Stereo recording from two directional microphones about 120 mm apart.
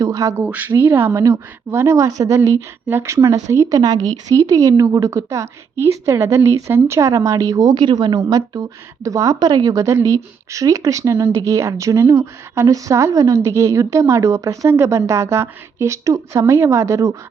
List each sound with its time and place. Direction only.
0.0 s speech: 25° right (ahead or behind)
0.4 s speech: 10° right (ahead or behind)